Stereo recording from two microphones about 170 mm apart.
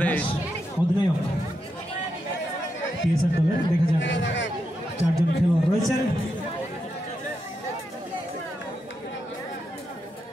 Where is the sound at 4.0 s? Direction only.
90° left.